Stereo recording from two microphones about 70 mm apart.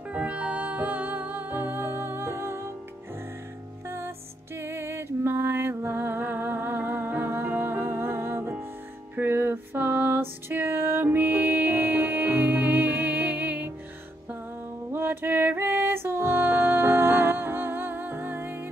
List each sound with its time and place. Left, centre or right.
0.1 s music: right
4.6 s music: right
14.9 s music: right